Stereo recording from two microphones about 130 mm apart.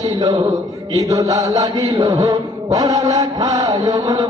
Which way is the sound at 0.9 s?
30° right (ahead or behind).